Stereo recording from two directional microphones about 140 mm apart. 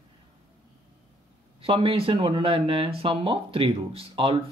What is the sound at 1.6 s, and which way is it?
Speech, 40° right (ahead or behind).